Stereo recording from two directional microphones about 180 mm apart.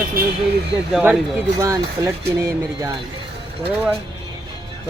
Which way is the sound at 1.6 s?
15° right (ahead or behind).